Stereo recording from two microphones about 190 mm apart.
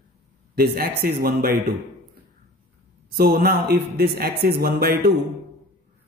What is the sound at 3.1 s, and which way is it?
A man's voice, 55° right (ahead or behind).